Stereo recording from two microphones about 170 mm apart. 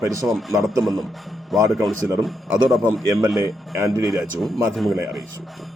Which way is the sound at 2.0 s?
15° right (ahead or behind).